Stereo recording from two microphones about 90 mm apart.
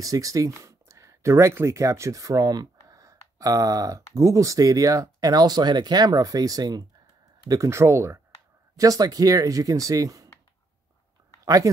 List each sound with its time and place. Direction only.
0.0 s speech: 40° right (ahead or behind)
11.4 s speech: 40° right (ahead or behind)